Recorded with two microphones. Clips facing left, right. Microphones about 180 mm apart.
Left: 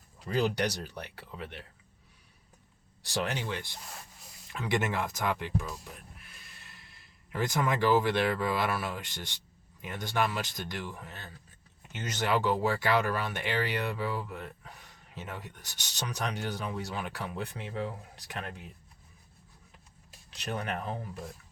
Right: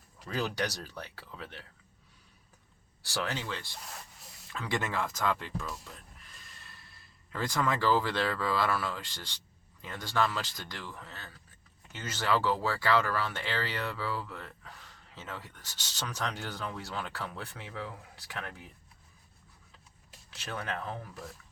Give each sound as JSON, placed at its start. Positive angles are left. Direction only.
{"t": 0.3, "sound": "speech", "side_deg": 20}
{"t": 3.0, "sound": "speech", "side_deg": 20}
{"t": 20.3, "sound": "speech", "side_deg": 20}